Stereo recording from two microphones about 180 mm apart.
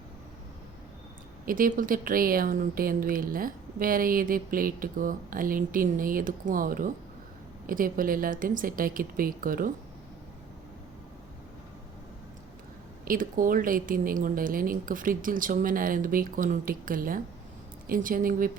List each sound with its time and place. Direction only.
1.5 s speech: 50° right (ahead or behind)
13.1 s speech: 50° right (ahead or behind)